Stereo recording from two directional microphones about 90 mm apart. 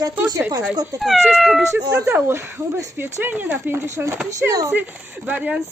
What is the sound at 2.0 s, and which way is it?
Speech, 30° right (ahead or behind).